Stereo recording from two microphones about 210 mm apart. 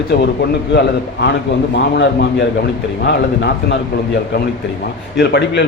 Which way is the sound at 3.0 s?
55° left (ahead or behind).